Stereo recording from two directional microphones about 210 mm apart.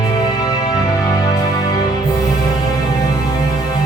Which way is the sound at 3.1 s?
15° left (ahead or behind).